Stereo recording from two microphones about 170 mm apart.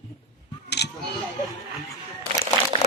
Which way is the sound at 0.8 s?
80° left.